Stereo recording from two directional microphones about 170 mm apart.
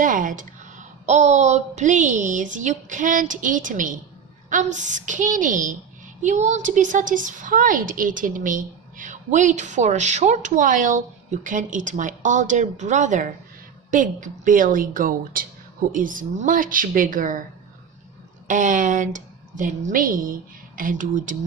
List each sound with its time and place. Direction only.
0.0 s a woman's voice: 50° right (ahead or behind)
18.4 s a woman's voice: 50° right (ahead or behind)